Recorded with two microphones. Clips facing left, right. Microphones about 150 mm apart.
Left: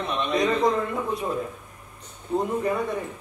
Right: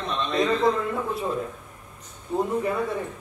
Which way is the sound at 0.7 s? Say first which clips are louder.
Even; 15° left (ahead or behind).